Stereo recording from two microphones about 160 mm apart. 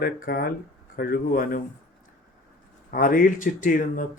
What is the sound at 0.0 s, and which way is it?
Speech, 70° left (ahead or behind).